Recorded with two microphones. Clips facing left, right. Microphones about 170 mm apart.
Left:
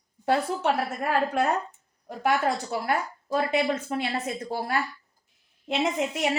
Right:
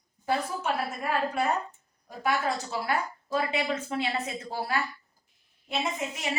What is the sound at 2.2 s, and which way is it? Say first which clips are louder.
Speech: left 4 dB; 50° left (ahead or behind).